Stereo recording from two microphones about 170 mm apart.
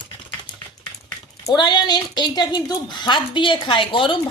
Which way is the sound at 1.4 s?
25° left (ahead or behind).